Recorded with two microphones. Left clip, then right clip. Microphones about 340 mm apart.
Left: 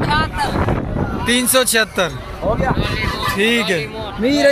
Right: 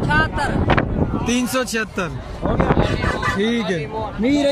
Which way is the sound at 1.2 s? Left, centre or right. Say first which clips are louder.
Left 8 dB; centre.